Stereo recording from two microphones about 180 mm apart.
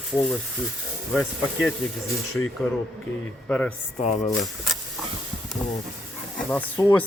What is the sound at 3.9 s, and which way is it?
Speech, 40° left (ahead or behind).